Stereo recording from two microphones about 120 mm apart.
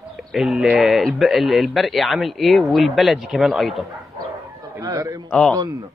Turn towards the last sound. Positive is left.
turn(degrees=5)  # may be behind; listen again after turning